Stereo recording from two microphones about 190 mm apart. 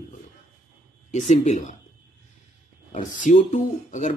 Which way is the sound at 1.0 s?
35° left (ahead or behind).